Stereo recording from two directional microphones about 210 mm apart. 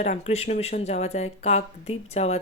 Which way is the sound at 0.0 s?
30° left (ahead or behind).